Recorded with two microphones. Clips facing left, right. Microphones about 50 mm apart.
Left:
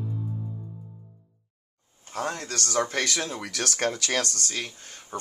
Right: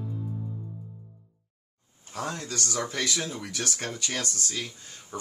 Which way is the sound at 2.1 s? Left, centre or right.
Left.